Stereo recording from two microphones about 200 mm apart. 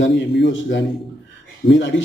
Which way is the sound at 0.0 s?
65° left (ahead or behind).